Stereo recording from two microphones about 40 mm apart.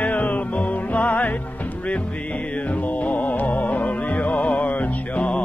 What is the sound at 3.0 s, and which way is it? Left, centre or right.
Music, left.